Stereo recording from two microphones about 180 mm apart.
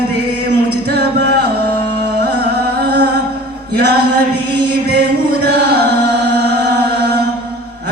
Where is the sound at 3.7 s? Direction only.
65° right (ahead or behind).